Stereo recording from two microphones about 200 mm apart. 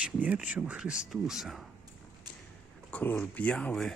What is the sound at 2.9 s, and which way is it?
Speech, 10° left (ahead or behind).